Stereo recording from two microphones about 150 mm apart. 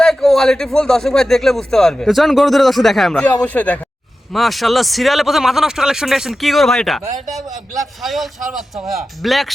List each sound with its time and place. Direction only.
0.0 s speech: centre (ahead or behind)
8.0 s speech: centre (ahead or behind)